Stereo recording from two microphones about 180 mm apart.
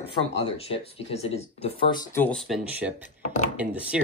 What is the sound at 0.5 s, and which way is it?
Speech, 35° left (ahead or behind).